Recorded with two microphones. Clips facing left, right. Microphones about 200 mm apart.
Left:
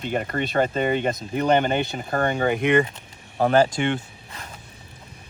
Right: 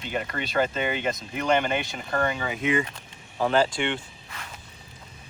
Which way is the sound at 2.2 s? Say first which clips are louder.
Left 7 dB; 50° left (ahead or behind).